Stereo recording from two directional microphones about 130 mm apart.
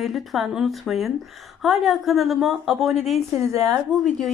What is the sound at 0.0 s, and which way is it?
Speech, centre (ahead or behind).